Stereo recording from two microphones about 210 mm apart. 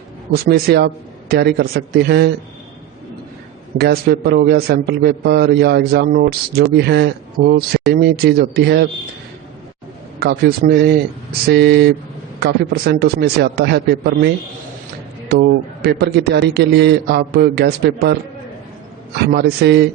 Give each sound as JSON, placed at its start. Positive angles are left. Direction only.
{"t": 0.4, "sound": "a man's voice", "side_deg": -50}
{"t": 3.8, "sound": "a man's voice", "side_deg": -50}
{"t": 10.2, "sound": "a man's voice", "side_deg": -50}
{"t": 15.3, "sound": "a man's voice", "side_deg": -50}